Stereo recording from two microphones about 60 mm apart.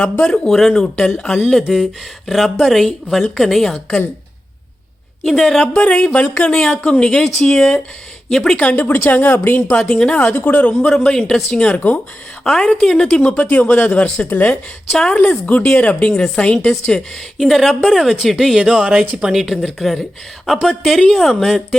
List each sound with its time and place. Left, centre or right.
0.0 s a man's voice: centre
0.4 s a man's voice: centre
1.5 s speech: centre
5.2 s speech: centre
5.5 s a man's voice: centre
8.5 s a woman's voice: left
9.6 s a man's voice: centre
15.1 s a man's voice: centre
15.4 s a man's voice: left
17.3 s speech: centre
18.8 s speech: centre
19.1 s speech: centre